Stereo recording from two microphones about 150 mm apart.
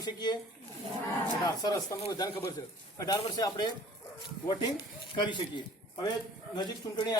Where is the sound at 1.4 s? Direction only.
25° left (ahead or behind).